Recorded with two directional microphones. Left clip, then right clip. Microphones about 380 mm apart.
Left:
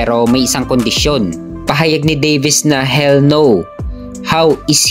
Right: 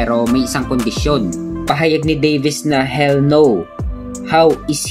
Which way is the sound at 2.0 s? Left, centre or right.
Left.